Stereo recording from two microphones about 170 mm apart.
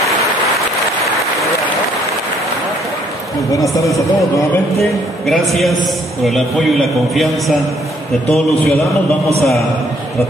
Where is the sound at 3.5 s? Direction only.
20° left (ahead or behind).